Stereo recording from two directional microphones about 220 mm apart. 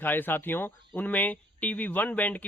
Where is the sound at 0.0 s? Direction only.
10° left (ahead or behind).